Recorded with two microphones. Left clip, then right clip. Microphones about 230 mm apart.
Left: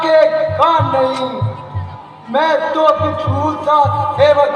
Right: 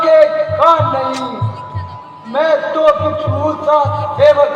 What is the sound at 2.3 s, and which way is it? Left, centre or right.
Music, left.